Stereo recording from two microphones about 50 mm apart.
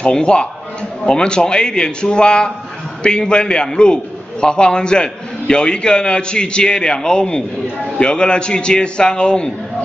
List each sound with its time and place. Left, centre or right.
0.0 s a man's voice: centre